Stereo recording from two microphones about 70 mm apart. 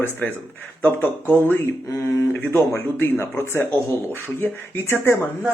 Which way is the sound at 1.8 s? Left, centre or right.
Left.